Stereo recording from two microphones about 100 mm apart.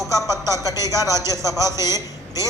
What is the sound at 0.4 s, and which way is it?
A man's voice, 30° right (ahead or behind).